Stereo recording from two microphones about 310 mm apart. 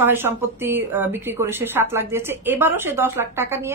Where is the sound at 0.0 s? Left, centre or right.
Centre.